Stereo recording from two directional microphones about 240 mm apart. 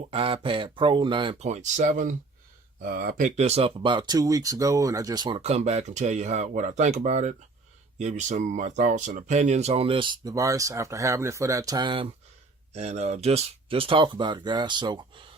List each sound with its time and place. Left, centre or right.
0.1 s speech: right